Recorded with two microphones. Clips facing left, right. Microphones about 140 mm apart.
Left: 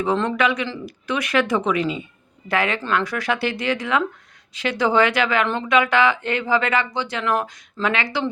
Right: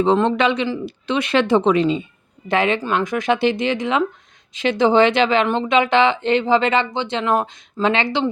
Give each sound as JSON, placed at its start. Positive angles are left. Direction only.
{"t": 0.2, "sound": "speech", "side_deg": -25}